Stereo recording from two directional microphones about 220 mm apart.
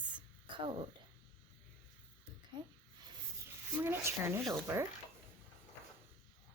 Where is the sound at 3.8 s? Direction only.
10° right (ahead or behind).